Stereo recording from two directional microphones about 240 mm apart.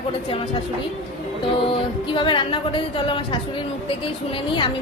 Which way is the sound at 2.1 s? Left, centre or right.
Left.